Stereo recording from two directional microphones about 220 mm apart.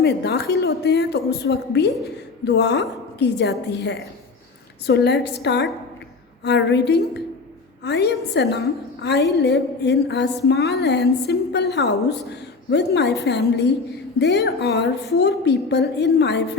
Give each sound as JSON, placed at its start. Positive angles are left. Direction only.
{"t": 0.0, "sound": "a woman's voice", "side_deg": 45}